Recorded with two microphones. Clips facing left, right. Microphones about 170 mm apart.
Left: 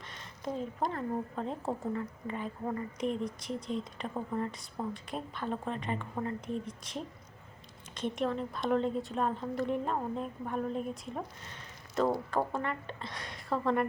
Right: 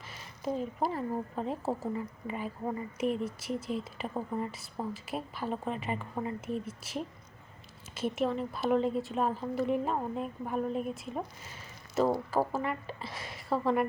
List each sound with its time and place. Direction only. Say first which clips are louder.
0.0 s a woman's voice: right 3 dB; 5° right (ahead or behind)